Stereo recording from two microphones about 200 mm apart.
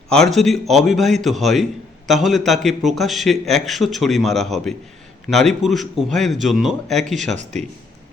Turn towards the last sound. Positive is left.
turn(degrees=-35)  # may be behind; listen again after turning